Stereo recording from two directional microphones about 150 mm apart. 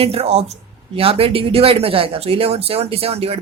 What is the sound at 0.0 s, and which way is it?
Speech, 40° right (ahead or behind).